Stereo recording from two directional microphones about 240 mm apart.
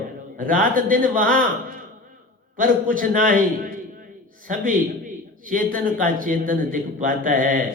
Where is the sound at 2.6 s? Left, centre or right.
Right.